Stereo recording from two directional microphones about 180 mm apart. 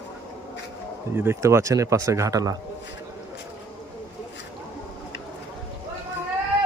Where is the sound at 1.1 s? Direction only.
15° right (ahead or behind).